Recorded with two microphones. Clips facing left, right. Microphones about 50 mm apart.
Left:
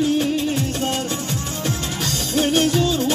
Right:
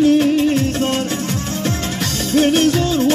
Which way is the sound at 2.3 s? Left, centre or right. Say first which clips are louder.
Right 4 dB; right.